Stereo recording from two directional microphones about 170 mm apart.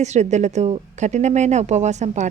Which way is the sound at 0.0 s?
40° right (ahead or behind).